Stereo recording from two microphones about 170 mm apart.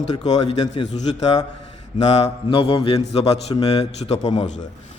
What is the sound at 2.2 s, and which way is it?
A man's voice, 35° left (ahead or behind).